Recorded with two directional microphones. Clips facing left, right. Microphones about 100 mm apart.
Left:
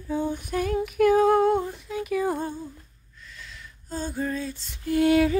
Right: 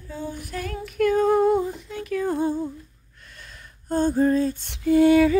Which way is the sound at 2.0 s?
10° left (ahead or behind).